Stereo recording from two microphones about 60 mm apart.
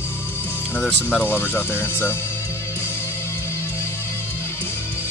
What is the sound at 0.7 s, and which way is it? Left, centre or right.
Speech, left.